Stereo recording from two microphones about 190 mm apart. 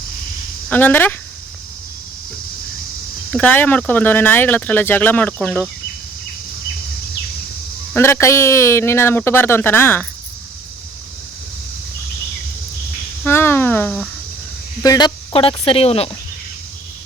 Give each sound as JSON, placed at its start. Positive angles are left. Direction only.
{"t": 0.7, "sound": "speech", "side_deg": 10}
{"t": 3.3, "sound": "speech", "side_deg": 10}
{"t": 7.9, "sound": "speech", "side_deg": 15}
{"t": 13.2, "sound": "speech", "side_deg": 10}
{"t": 14.8, "sound": "speech", "side_deg": 20}